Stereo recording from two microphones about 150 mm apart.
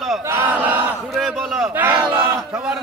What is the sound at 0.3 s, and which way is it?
Battle cry, 15° right (ahead or behind).